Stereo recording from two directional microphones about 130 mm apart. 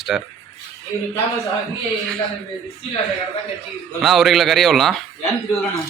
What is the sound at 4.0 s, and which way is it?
Speech, centre (ahead or behind).